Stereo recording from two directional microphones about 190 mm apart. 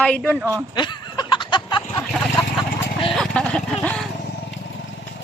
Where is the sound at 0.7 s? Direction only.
25° left (ahead or behind).